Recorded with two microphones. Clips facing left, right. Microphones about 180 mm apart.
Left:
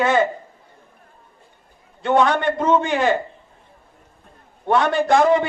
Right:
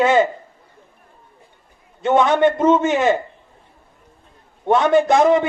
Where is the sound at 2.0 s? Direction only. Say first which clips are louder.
Right 3 dB; 20° right (ahead or behind).